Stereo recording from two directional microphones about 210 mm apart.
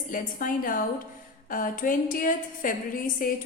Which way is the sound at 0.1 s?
40° left (ahead or behind).